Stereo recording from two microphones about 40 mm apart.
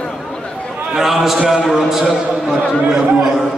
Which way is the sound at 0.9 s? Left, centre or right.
Centre.